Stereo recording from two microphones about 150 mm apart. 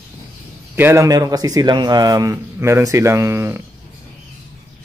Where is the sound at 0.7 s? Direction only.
15° right (ahead or behind).